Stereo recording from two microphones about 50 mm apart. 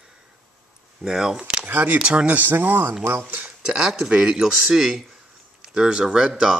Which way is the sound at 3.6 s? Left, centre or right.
Centre.